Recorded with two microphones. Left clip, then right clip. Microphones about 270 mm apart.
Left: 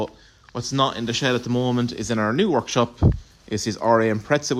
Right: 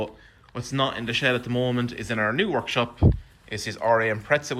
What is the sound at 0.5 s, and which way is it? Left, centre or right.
Speech, centre.